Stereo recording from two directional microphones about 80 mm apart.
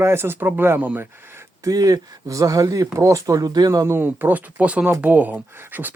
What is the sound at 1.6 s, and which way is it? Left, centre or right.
Speech, right.